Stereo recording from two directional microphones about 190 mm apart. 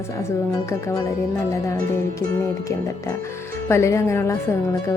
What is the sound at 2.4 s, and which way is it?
Speech, 15° left (ahead or behind).